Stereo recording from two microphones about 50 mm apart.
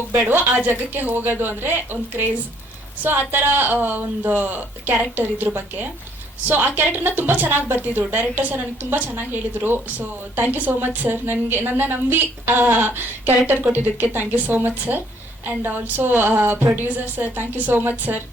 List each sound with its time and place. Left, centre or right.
0.1 s a woman's voice: right